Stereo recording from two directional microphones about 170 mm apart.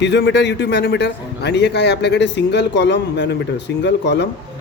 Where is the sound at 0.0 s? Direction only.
90° left.